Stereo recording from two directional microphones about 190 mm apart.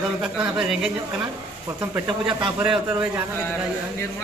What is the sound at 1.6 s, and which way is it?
Speech, 15° right (ahead or behind).